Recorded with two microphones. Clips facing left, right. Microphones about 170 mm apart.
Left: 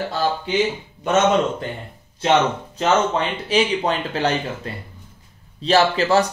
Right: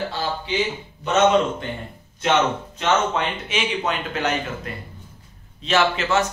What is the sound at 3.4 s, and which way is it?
Speech, 35° left (ahead or behind).